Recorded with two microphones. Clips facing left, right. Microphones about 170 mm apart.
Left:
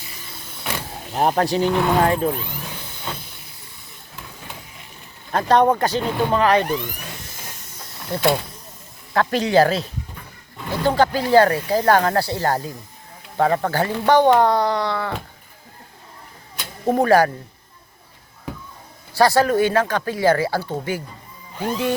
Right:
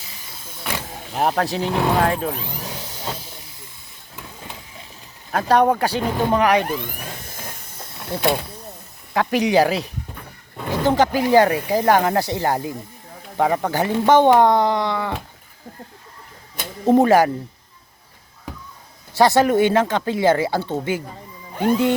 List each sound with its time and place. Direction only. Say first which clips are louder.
1.1 s speech: left 2 dB; centre (ahead or behind)
5.3 s speech: even; 10° right (ahead or behind)
6.8 s a sound: right 1 dB; 50° right (ahead or behind)
9.1 s speech: even; 15° right (ahead or behind)
16.8 s speech: right 2 dB; 20° right (ahead or behind)
19.1 s speech: right 1 dB; 20° right (ahead or behind)